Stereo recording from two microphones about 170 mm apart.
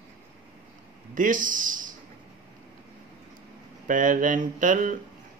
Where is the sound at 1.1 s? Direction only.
50° right (ahead or behind).